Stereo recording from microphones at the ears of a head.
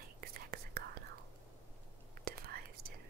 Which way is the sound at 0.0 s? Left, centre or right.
Right.